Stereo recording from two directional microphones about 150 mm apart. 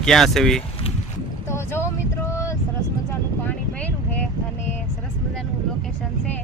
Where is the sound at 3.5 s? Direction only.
10° left (ahead or behind).